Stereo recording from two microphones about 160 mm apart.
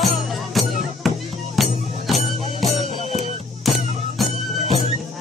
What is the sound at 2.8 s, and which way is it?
Music, 45° right (ahead or behind).